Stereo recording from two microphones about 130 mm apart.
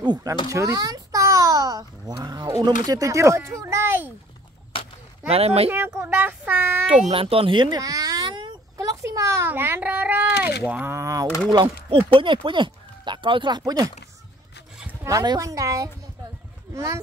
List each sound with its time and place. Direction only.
0.0 s a child's voice: 30° right (ahead or behind)
5.3 s speech: 50° right (ahead or behind)
5.7 s a child's voice: 15° right (ahead or behind)
7.1 s speech: 45° right (ahead or behind)
8.7 s a child's voice: 25° right (ahead or behind)
11.5 s speech: 45° right (ahead or behind)
15.0 s a child's voice: 25° right (ahead or behind)